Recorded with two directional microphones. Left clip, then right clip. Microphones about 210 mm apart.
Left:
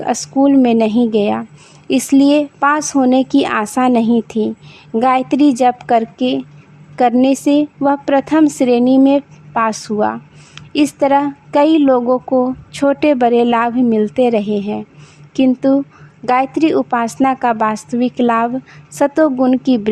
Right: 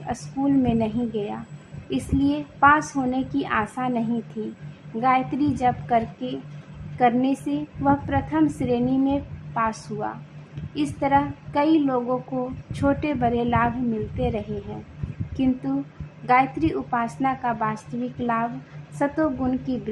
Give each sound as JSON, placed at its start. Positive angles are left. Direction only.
{"t": 0.0, "sound": "a woman's voice", "side_deg": 50}
{"t": 16.2, "sound": "a woman's voice", "side_deg": 55}